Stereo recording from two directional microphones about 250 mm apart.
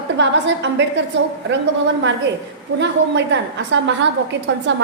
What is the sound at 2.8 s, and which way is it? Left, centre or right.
A woman's voice, right.